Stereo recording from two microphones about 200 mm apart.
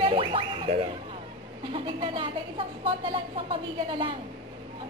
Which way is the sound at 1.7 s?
25° right (ahead or behind).